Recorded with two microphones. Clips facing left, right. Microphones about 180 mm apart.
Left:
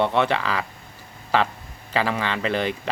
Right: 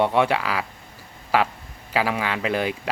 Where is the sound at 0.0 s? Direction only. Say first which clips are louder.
Right 1 dB; 10° right (ahead or behind).